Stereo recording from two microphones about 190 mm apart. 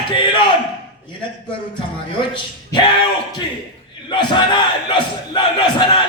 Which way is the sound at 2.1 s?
25° left (ahead or behind).